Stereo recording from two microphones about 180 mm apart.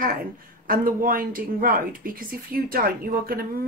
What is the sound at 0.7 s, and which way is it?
Speech, 50° right (ahead or behind).